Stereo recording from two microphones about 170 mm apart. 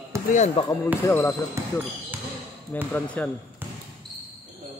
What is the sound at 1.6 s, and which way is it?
Speech, 15° right (ahead or behind).